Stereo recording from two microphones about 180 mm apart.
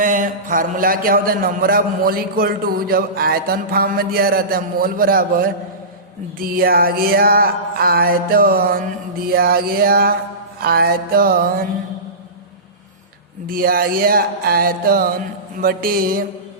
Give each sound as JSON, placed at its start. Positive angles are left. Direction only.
{"t": 0.0, "sound": "a man's voice", "side_deg": -50}
{"t": 13.5, "sound": "a man's voice", "side_deg": -55}
{"t": 15.5, "sound": "a sound", "side_deg": -55}